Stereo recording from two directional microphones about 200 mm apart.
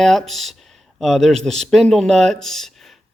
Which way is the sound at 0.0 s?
Centre (ahead or behind).